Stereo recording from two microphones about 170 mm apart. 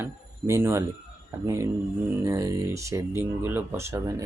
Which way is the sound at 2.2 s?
20° right (ahead or behind).